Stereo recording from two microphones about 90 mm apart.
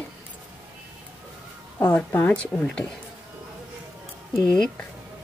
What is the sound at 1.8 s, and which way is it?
Speech, 20° left (ahead or behind).